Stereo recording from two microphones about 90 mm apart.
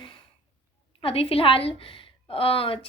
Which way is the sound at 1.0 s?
90° left.